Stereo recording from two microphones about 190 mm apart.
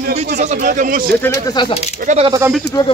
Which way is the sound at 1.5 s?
25° left (ahead or behind).